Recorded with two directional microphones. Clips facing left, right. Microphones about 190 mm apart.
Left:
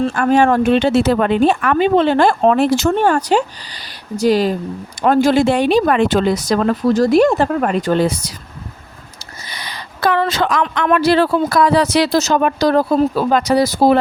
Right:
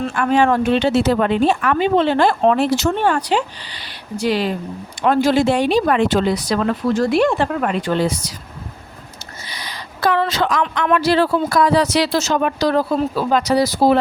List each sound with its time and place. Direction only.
0.0 s speech: 40° left (ahead or behind)
8.0 s speech: 55° left (ahead or behind)
9.5 s speech: 60° left (ahead or behind)